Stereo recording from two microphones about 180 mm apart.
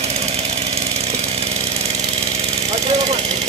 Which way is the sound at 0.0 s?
35° right (ahead or behind).